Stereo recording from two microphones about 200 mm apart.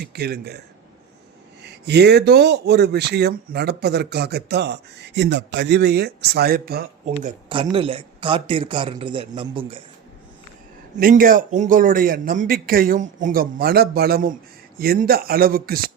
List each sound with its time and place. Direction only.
0.0 s a man's voice: 50° right (ahead or behind)
1.6 s speech: 55° right (ahead or behind)
7.0 s speech: 40° right (ahead or behind)
7.5 s a man's voice: 25° right (ahead or behind)
10.9 s a man's voice: 40° right (ahead or behind)